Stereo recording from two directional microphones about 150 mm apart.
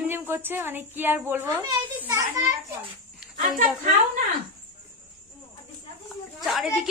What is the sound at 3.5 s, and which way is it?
Speech, 60° right (ahead or behind).